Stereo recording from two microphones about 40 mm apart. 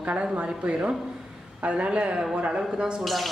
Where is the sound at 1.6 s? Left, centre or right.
Right.